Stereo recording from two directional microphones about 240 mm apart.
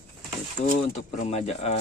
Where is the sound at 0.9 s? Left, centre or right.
Left.